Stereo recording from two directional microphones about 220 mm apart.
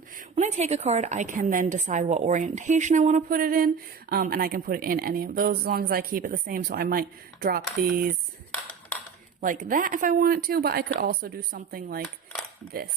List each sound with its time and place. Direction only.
0.2 s a woman's voice: 35° right (ahead or behind)
9.4 s a woman's voice: 35° right (ahead or behind)